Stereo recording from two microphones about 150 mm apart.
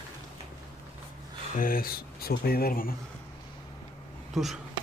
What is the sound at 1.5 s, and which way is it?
Speech, 70° left (ahead or behind).